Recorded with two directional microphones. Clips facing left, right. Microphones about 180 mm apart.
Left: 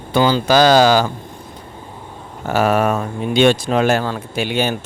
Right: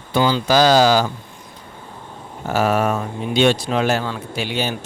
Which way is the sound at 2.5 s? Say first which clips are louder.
Left 2 dB; 65° left (ahead or behind).